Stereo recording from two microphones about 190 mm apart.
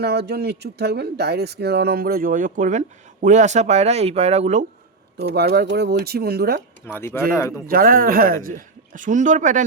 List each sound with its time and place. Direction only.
0.0 s speech: 60° right (ahead or behind); by 4.6 s 35° right (ahead or behind)
5.1 s speech: 60° right (ahead or behind)
6.8 s speech: 10° left (ahead or behind)
7.7 s speech: 50° right (ahead or behind)